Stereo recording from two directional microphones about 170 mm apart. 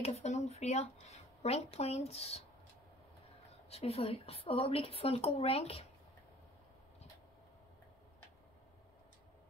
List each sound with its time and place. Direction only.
0.0 s speech: 40° left (ahead or behind)
3.7 s speech: 35° left (ahead or behind)